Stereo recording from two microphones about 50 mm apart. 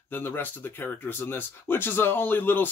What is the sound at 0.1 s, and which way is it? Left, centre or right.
Speech, left.